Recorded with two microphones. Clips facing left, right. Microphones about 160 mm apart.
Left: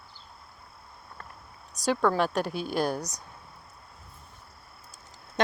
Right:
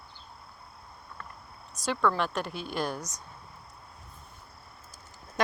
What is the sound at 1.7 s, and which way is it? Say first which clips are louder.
Speech: left 3 dB; 40° left (ahead or behind).